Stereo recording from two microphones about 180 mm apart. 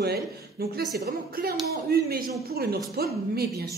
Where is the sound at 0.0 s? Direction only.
60° right (ahead or behind).